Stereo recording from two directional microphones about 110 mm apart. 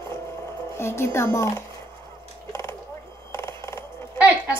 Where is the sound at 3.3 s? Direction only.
25° left (ahead or behind).